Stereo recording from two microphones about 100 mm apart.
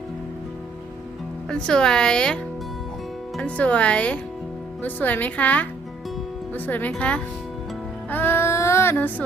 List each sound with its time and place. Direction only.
1.5 s speech: 5° left (ahead or behind)
3.4 s speech: 15° left (ahead or behind)
8.1 s child singing: 20° left (ahead or behind)